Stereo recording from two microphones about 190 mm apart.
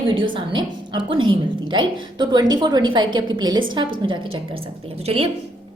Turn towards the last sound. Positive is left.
turn(degrees=-30)  # may be behind; listen again after turning